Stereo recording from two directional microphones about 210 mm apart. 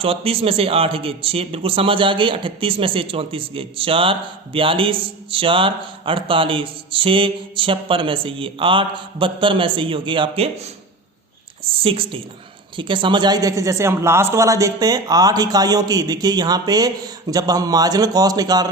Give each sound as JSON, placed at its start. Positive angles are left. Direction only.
{"t": 0.0, "sound": "a man's voice", "side_deg": -25}
{"t": 11.6, "sound": "a woman's voice", "side_deg": -25}